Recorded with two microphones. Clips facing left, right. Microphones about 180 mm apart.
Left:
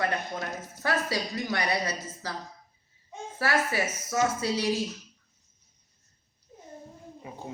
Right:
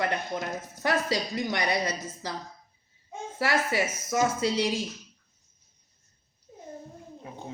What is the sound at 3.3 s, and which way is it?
Speech, 15° right (ahead or behind).